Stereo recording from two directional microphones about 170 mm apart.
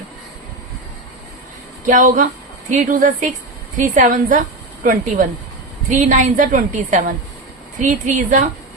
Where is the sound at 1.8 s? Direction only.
50° right (ahead or behind).